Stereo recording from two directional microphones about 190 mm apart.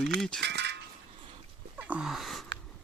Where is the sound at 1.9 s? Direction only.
5° right (ahead or behind).